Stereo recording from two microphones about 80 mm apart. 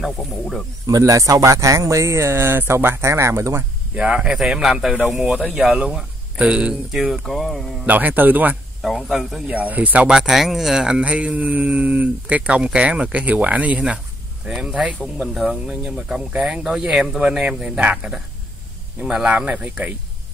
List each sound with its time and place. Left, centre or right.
0.0 s speech: centre
0.8 s speech: right
3.9 s speech: centre
7.8 s a man's voice: right
8.8 s speech: centre
9.5 s a man's voice: centre
10.0 s speech: centre